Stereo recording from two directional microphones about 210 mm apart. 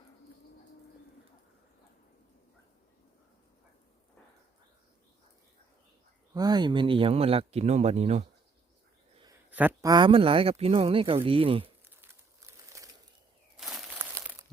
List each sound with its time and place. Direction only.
6.3 s speech: 20° right (ahead or behind)
9.5 s speech: 10° right (ahead or behind)
9.9 s speech: 25° right (ahead or behind)
13.6 s a sound: centre (ahead or behind)
14.2 s crumpling: 10° right (ahead or behind)